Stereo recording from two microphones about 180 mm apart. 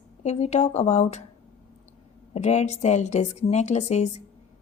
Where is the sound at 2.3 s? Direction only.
40° left (ahead or behind).